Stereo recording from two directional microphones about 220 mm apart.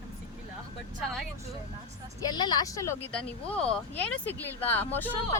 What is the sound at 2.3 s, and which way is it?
Speech, 20° left (ahead or behind).